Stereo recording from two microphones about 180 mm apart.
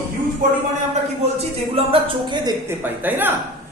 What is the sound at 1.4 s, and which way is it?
Speech, 30° right (ahead or behind).